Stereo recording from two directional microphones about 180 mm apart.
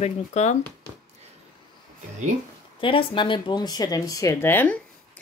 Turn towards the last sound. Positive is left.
turn(degrees=10)  # may be behind; listen again after turning